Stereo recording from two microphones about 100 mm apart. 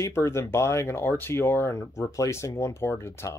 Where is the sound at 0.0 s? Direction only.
30° left (ahead or behind).